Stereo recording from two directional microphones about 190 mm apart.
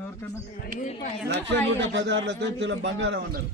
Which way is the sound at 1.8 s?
70° right (ahead or behind).